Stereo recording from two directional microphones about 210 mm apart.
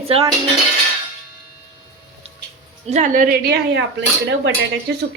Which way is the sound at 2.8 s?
35° right (ahead or behind).